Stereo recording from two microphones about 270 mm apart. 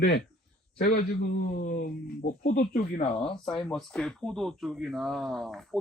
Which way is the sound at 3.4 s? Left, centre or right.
Centre.